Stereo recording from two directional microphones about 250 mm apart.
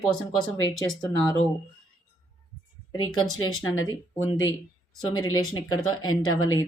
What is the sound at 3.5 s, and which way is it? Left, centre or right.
Speech, left.